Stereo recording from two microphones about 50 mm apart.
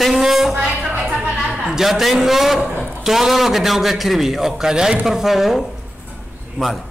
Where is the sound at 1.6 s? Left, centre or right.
Centre.